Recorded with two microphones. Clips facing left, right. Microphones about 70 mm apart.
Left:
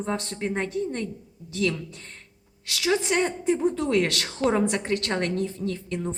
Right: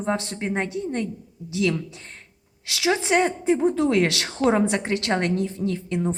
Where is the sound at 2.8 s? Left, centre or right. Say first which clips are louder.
Right 3 dB; centre.